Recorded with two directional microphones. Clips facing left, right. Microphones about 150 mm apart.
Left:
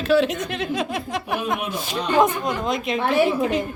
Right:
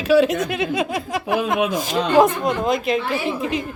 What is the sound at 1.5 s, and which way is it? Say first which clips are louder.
Speech: right 6 dB; 90° right.